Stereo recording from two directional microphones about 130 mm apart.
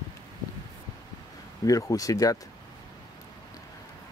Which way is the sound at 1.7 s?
25° left (ahead or behind).